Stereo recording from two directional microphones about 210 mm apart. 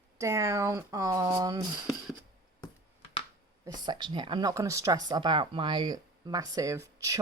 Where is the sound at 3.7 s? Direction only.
20° right (ahead or behind).